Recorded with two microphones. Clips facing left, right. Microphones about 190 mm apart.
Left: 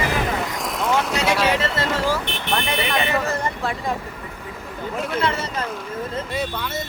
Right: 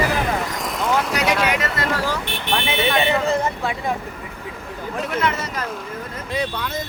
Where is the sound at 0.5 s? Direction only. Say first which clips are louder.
Even; centre (ahead or behind).